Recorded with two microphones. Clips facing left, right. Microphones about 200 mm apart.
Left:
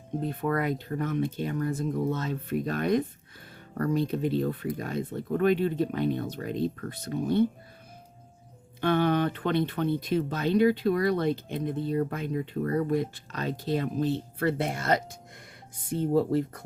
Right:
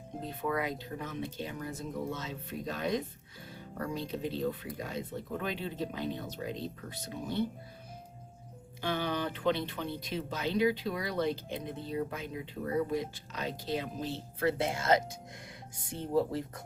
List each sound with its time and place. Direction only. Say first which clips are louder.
0.2 s speech: left 5 dB; 55° left (ahead or behind)
8.8 s speech: left 9 dB; 55° left (ahead or behind)